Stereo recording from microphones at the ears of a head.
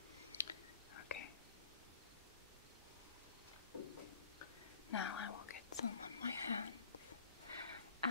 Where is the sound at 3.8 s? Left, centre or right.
Left.